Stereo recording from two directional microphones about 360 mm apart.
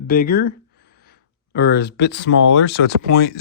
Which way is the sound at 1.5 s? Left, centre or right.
Left.